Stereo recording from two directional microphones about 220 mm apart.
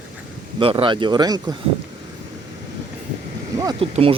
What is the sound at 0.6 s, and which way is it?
Speech, 25° right (ahead or behind).